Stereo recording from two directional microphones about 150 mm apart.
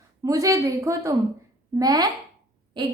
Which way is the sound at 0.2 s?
20° right (ahead or behind).